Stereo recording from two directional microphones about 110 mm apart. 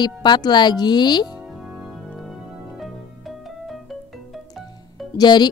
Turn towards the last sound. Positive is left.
turn(degrees=40)  # may be behind; listen again after turning